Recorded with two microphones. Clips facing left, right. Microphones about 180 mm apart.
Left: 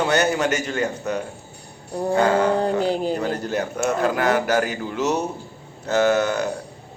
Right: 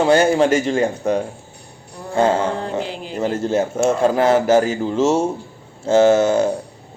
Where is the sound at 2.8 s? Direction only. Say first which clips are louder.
Left 5 dB; 40° left (ahead or behind).